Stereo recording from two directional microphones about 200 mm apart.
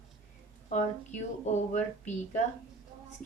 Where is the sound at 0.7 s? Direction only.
35° left (ahead or behind).